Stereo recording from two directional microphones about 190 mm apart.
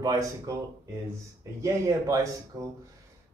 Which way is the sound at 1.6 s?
15° right (ahead or behind).